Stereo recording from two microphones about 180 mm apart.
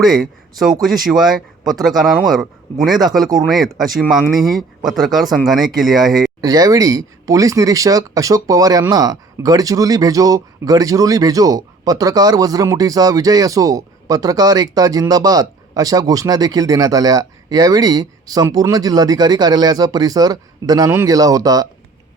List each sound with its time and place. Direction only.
0.0 s speech: centre (ahead or behind)
6.4 s speech: 20° right (ahead or behind)